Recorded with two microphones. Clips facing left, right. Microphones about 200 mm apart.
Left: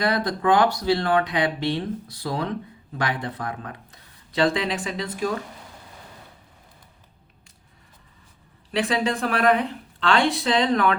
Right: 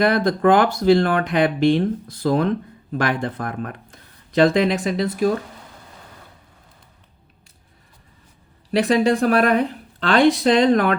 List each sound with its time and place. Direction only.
0.0 s speech: 55° right (ahead or behind)
8.7 s speech: 40° right (ahead or behind)